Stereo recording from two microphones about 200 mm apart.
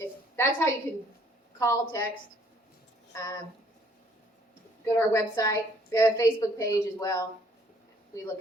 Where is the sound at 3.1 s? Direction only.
15° left (ahead or behind).